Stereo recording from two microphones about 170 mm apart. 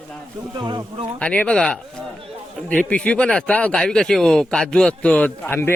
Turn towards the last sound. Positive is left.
turn(degrees=15)  # may be behind; listen again after turning